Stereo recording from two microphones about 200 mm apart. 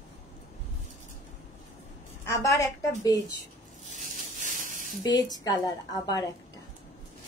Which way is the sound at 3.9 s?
40° right (ahead or behind).